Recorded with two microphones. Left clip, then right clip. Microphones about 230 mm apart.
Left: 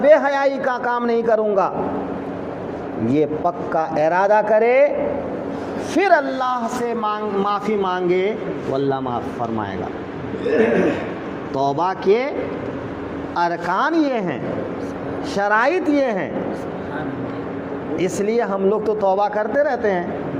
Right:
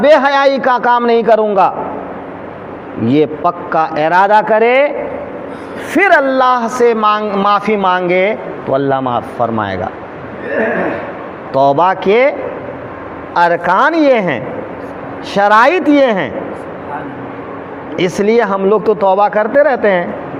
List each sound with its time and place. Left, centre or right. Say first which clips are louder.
0.0 s speech: right 6 dB; right
3.1 s speech: right 7 dB; right
5.9 s speech: right 7 dB; right
11.5 s speech: right 10 dB; right
13.3 s speech: right 10 dB; right
17.9 s speech: right 8 dB; right